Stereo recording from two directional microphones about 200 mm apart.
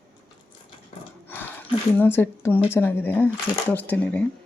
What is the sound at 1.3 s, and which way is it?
Speech, 10° left (ahead or behind).